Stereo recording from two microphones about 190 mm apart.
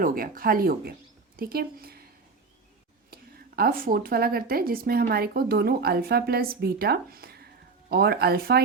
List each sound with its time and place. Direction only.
0.0 s speech: 50° right (ahead or behind)
3.1 s speech: 50° right (ahead or behind)